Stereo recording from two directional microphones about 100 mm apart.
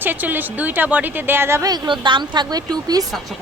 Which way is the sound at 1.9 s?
50° right (ahead or behind).